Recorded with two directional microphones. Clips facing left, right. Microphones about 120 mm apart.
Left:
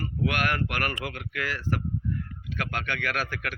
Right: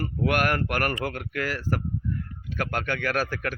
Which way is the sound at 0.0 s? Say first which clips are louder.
Right 3 dB; 45° right (ahead or behind).